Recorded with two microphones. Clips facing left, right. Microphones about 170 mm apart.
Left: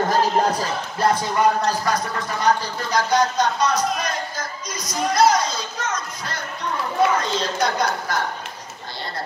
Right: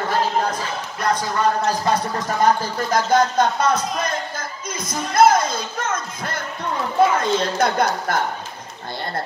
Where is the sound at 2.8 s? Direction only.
50° right (ahead or behind).